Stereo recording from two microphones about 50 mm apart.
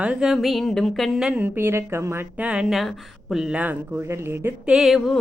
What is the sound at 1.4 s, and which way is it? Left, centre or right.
Speech, right.